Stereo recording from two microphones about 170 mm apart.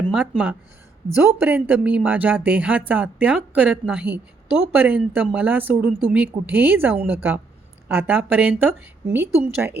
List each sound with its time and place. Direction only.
0.1 s speech: 5° right (ahead or behind)